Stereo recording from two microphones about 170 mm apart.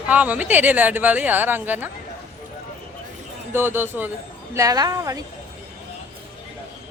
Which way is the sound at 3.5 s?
15° right (ahead or behind).